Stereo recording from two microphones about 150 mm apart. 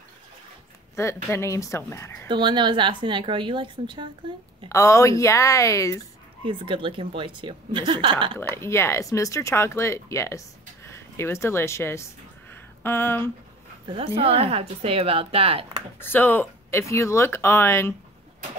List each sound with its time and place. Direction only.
0.9 s speech: 20° left (ahead or behind)
2.2 s a woman's voice: 30° right (ahead or behind)
4.6 s a woman's voice: 20° left (ahead or behind)
6.4 s a woman's voice: 35° right (ahead or behind)
8.5 s speech: 15° left (ahead or behind)
13.8 s a woman's voice: 40° right (ahead or behind)
16.0 s speech: 15° left (ahead or behind)